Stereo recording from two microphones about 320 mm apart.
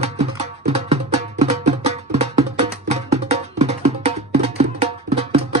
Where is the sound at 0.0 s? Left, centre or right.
Centre.